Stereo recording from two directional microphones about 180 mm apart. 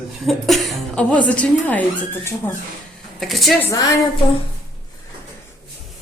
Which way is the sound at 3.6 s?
15° left (ahead or behind).